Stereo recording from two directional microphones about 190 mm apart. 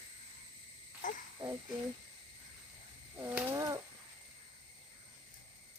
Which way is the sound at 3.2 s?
10° right (ahead or behind).